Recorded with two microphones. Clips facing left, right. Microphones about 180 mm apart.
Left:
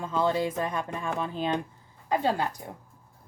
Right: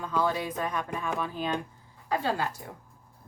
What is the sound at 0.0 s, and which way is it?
A woman's voice, 25° left (ahead or behind).